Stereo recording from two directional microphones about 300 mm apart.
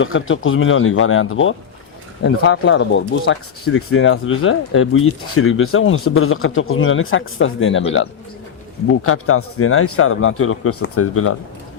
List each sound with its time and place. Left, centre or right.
0.0 s speech: left